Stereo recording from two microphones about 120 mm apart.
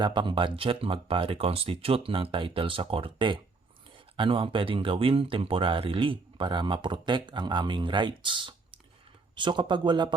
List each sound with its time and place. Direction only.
0.0 s speech: 40° right (ahead or behind)